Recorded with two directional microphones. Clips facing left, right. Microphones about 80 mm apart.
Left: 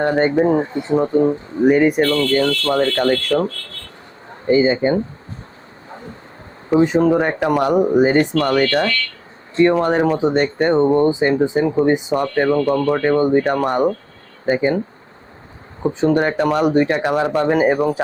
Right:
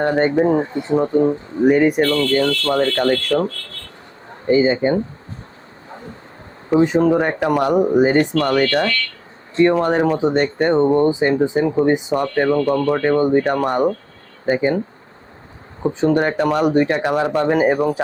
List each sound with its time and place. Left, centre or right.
0.0 s speech: left
1.7 s speech: centre
4.4 s speech: centre
6.8 s speech: left
8.0 s speech: centre
16.0 s speech: left